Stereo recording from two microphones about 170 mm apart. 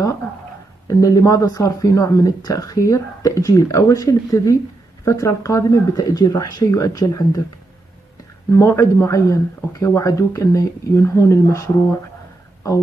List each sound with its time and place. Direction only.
0.8 s speech: 20° left (ahead or behind)
8.5 s speech: 15° left (ahead or behind)